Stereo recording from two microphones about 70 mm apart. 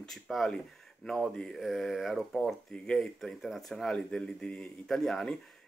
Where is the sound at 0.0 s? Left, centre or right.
Centre.